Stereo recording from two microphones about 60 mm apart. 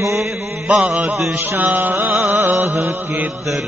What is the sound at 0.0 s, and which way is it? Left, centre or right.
Mantra, right.